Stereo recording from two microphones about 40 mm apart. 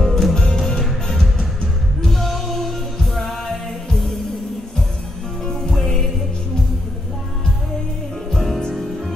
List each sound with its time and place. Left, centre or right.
0.0 s music: centre
0.3 s music: centre
5.4 s music: centre
8.3 s music: centre